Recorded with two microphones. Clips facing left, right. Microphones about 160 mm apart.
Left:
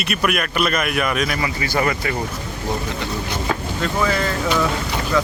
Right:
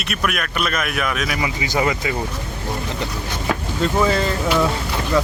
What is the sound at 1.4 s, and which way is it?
Speech, 15° right (ahead or behind).